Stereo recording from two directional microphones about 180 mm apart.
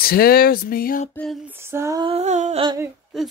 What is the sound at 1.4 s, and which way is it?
Female singing, 10° right (ahead or behind).